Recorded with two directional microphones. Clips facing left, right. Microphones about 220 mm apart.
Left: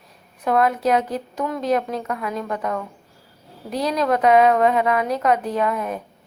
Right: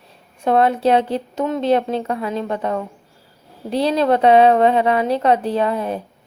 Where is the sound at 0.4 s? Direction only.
30° right (ahead or behind).